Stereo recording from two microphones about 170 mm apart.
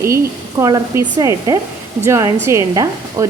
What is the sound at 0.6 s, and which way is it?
A woman's voice, 20° right (ahead or behind).